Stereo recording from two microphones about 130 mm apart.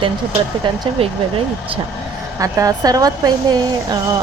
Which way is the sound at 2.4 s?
25° right (ahead or behind).